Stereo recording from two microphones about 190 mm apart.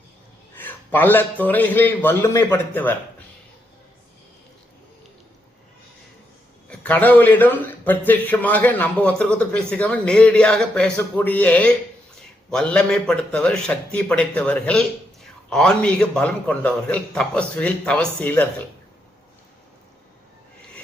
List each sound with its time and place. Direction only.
0.5 s a sound: 10° left (ahead or behind)
0.9 s a man's voice: 10° left (ahead or behind)
6.7 s a man's voice: 10° left (ahead or behind)